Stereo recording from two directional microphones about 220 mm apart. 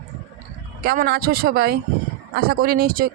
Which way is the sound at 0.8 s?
45° right (ahead or behind).